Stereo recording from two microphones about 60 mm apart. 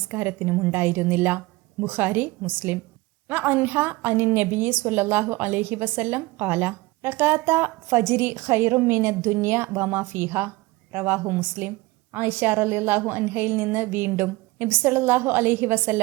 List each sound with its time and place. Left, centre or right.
0.1 s a woman's voice: right